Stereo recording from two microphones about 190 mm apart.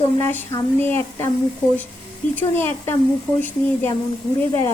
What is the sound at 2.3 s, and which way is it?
Speech, 10° left (ahead or behind).